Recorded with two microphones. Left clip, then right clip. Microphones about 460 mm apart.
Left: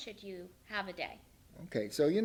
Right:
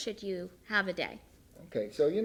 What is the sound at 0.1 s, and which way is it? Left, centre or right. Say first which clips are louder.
A woman's voice: right 9 dB; right.